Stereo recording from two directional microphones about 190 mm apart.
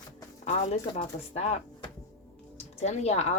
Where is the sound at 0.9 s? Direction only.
30° left (ahead or behind).